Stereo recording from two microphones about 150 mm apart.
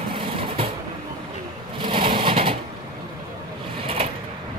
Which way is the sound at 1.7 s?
35° right (ahead or behind).